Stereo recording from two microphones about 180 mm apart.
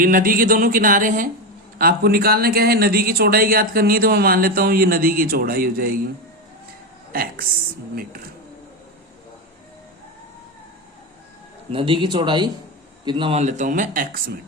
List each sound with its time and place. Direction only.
0.0 s speech: 50° right (ahead or behind)
7.1 s speech: 55° right (ahead or behind)
11.7 s speech: 30° right (ahead or behind)
13.4 s speech: 40° right (ahead or behind)